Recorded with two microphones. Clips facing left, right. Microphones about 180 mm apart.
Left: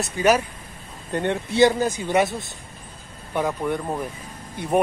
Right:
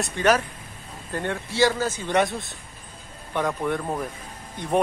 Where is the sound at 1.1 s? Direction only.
20° left (ahead or behind).